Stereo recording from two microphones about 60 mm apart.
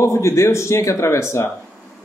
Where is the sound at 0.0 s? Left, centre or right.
Left.